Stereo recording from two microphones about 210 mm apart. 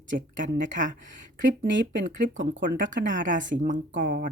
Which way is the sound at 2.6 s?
40° right (ahead or behind).